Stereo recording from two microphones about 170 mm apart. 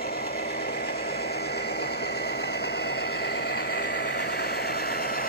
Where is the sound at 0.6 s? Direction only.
70° left (ahead or behind).